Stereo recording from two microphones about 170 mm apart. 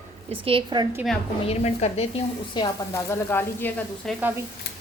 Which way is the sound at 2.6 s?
25° left (ahead or behind).